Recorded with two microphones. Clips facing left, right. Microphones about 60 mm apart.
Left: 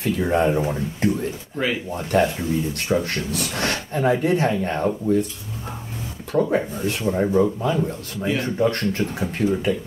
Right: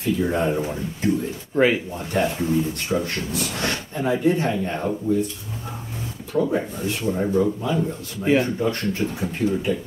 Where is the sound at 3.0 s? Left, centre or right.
Left.